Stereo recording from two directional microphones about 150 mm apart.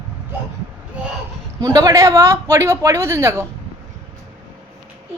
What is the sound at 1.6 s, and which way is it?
Speech, 25° right (ahead or behind).